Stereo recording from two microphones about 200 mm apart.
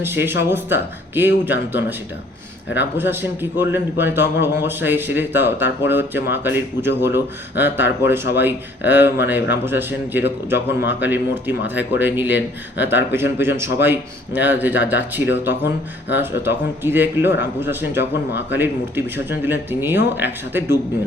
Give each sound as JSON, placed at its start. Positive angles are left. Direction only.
{"t": 0.0, "sound": "a man's voice", "side_deg": -10}